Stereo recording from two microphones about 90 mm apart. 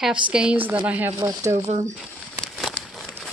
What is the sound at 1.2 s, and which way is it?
Speech, 40° right (ahead or behind).